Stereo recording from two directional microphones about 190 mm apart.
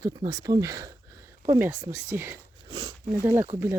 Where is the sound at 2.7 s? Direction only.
25° right (ahead or behind).